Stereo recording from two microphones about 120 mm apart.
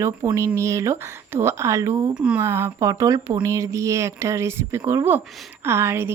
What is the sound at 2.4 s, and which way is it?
Speech, 20° right (ahead or behind).